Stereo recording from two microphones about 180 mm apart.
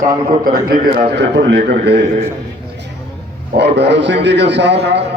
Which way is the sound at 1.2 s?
80° right.